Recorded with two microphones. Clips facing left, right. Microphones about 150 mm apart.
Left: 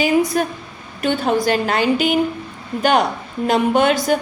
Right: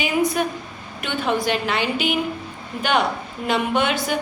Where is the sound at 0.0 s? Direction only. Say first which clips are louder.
Left 4 dB; 40° left (ahead or behind).